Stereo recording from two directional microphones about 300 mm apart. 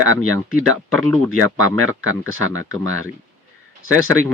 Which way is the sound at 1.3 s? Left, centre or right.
Right.